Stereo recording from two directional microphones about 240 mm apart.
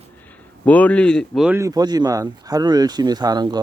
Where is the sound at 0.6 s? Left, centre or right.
Centre.